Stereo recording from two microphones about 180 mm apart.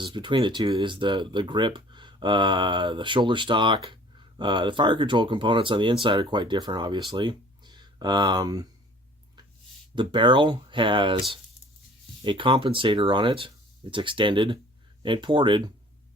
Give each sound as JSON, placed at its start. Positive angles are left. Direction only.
{"t": 0.0, "sound": "speech", "side_deg": -25}
{"t": 9.9, "sound": "speech", "side_deg": -25}